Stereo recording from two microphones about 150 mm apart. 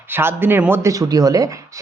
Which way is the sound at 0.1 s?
15° right (ahead or behind).